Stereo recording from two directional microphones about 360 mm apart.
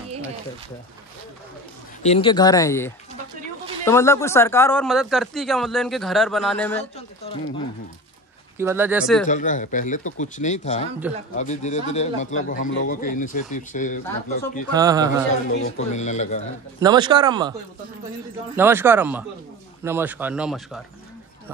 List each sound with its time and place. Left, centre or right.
2.0 s speech: centre
7.0 s a sound: centre
8.5 s speech: centre
9.3 s speech: left
14.7 s speech: centre
15.9 s speech: centre
16.8 s speech: centre
18.6 s speech: centre